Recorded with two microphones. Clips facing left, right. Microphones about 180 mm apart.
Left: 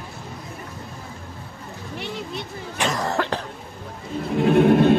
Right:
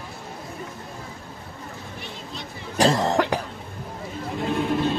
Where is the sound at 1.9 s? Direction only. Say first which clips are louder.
Left 6 dB; 70° left (ahead or behind).